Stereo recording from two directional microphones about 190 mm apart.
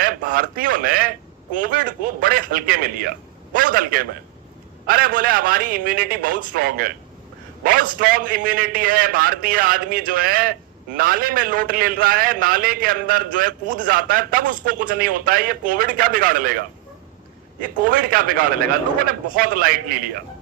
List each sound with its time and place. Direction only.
0.0 s a man's voice: 50° right (ahead or behind)